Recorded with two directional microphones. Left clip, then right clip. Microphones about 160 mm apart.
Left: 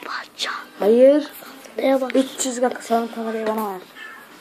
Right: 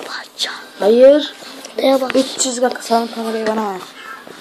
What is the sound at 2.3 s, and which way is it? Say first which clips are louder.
Speech: right 5 dB; 10° left (ahead or behind).